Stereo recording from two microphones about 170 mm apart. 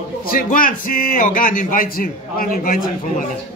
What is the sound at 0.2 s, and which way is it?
Speech, 55° left (ahead or behind).